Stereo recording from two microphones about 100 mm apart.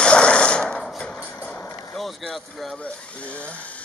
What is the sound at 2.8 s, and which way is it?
Electric toothbrush, 15° left (ahead or behind).